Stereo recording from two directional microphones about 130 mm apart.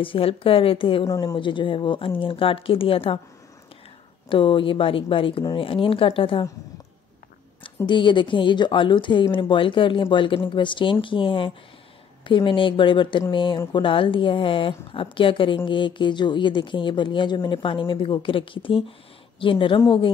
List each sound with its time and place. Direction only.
0.0 s speech: 45° left (ahead or behind)
4.3 s speech: 40° left (ahead or behind)
7.6 s a woman's voice: 40° left (ahead or behind)